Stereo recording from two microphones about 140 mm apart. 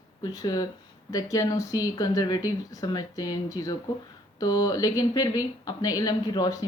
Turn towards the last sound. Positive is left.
turn(degrees=25)  # may be behind; listen again after turning